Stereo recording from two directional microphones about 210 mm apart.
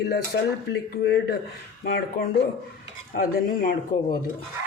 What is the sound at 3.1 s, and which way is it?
Speech, 40° left (ahead or behind).